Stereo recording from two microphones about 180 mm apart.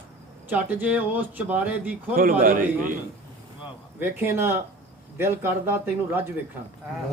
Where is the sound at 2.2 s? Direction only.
50° right (ahead or behind).